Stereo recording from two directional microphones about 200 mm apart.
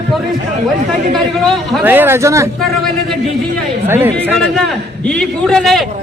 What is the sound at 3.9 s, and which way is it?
Speech, 10° right (ahead or behind).